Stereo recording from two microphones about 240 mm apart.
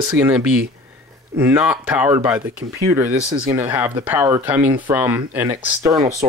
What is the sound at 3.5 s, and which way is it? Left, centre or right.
Speech, centre.